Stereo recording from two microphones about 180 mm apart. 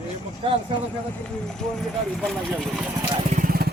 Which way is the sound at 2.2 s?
Centre (ahead or behind).